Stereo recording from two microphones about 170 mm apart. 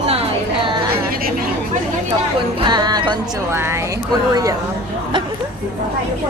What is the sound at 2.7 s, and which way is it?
Music, 25° right (ahead or behind).